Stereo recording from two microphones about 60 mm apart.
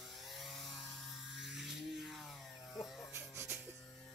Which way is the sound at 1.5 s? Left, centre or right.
Centre.